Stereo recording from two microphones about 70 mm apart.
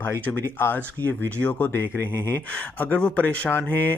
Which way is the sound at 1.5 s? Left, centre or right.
Left.